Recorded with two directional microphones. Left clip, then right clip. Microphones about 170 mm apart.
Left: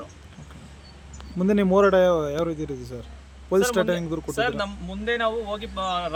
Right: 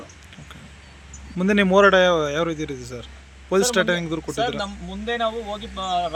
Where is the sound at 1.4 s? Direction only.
Centre (ahead or behind).